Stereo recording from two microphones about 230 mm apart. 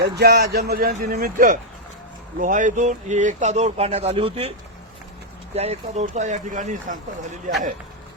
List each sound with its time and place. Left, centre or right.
0.0 s speech: right
5.5 s speech: right